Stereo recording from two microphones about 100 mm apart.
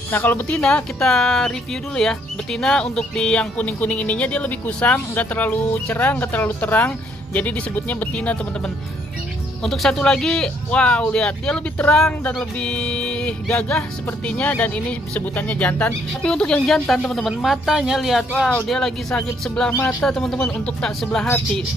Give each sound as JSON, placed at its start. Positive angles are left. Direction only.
{"t": 0.1, "sound": "speech", "side_deg": 20}